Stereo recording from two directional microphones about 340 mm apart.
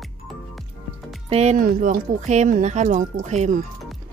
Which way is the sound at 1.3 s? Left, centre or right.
Centre.